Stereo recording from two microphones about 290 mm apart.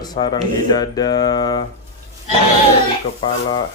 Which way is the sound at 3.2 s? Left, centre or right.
Centre.